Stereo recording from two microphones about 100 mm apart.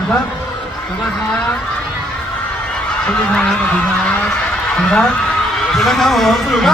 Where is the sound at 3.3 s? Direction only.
10° left (ahead or behind).